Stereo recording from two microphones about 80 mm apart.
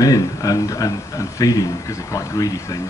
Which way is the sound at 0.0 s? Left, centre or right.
Left.